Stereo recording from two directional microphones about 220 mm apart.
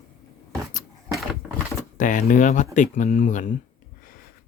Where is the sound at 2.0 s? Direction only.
35° left (ahead or behind).